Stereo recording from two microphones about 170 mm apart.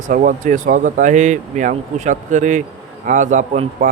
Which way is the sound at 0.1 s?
50° right (ahead or behind).